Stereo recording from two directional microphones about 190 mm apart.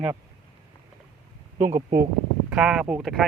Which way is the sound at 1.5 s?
40° right (ahead or behind).